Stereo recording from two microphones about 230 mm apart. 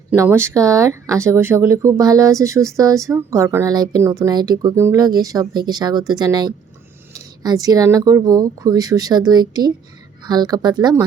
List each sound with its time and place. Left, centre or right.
0.1 s speech: centre